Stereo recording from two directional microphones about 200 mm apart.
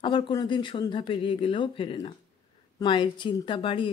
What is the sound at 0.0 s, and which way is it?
Speech, 25° left (ahead or behind).